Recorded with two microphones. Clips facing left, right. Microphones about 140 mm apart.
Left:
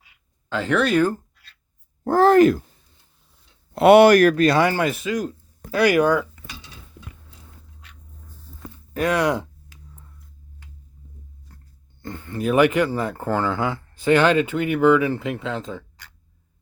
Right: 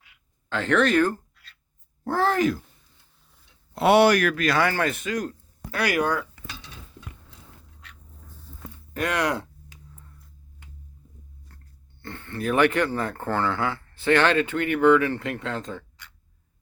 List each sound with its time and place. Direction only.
0.5 s speech: 10° left (ahead or behind)
2.0 s speech: 50° left (ahead or behind)
3.8 s speech: 55° left (ahead or behind)
4.4 s speech: 20° left (ahead or behind)
6.4 s dishes: 85° right
8.9 s speech: 15° left (ahead or behind)
9.2 s speech: 25° left (ahead or behind)
11.5 s a sound: 15° left (ahead or behind)
12.0 s speech: 15° left (ahead or behind)